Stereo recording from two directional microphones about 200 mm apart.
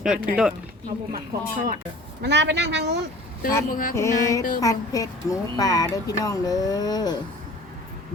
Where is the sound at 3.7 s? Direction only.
45° left (ahead or behind).